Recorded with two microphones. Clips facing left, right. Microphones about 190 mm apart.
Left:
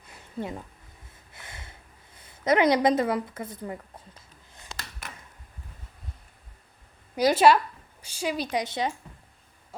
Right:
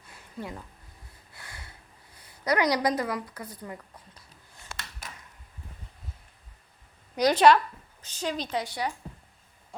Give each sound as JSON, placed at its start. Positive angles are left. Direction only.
{"t": 0.1, "sound": "a sound", "side_deg": 25}
{"t": 1.3, "sound": "snort", "side_deg": 20}
{"t": 2.1, "sound": "a woman's voice", "side_deg": 25}
{"t": 5.0, "sound": "a sound", "side_deg": 65}
{"t": 7.2, "sound": "a woman's voice", "side_deg": 5}
{"t": 8.6, "sound": "a woman's voice", "side_deg": 20}